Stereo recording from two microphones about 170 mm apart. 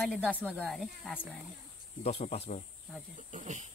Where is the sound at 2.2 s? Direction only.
40° left (ahead or behind).